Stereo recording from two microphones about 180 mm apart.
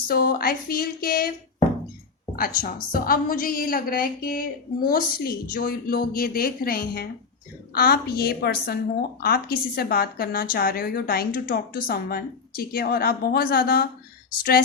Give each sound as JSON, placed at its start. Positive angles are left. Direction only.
{"t": 0.1, "sound": "a woman's voice", "side_deg": 55}
{"t": 2.3, "sound": "a woman's voice", "side_deg": 50}